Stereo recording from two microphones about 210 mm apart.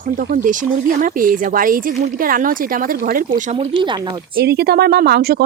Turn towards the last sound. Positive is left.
turn(degrees=-50)  # may be behind; listen again after turning